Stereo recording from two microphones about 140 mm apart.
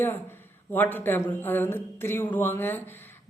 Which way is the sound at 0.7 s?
15° left (ahead or behind).